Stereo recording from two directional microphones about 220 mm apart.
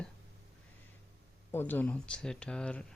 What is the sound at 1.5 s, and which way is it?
Speech, 10° left (ahead or behind).